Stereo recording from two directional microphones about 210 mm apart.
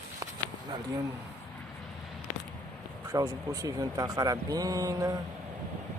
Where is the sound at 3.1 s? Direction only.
15° right (ahead or behind).